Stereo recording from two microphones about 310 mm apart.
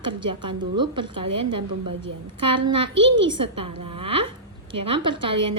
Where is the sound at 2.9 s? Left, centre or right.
Right.